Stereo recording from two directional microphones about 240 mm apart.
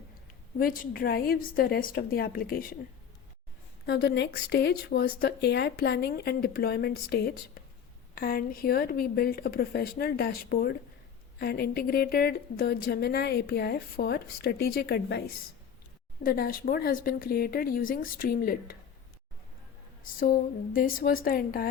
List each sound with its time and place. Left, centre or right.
0.6 s a woman's voice: left
3.8 s a woman's voice: left
16.2 s a woman's voice: left
20.1 s a woman's voice: left